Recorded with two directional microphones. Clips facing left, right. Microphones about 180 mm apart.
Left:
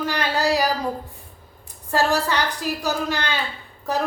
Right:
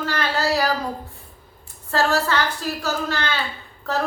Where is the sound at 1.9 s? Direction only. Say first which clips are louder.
Even; 15° left (ahead or behind).